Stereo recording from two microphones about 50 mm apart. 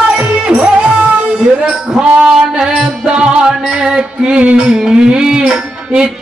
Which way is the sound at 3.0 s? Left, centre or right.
Centre.